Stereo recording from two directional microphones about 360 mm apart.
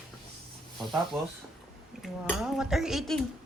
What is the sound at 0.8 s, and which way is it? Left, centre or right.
Speech, centre.